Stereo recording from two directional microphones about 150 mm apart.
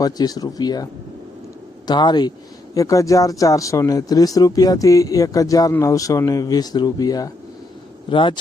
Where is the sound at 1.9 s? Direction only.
30° left (ahead or behind).